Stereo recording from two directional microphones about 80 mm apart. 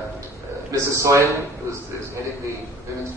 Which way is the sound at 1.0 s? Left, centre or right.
Right.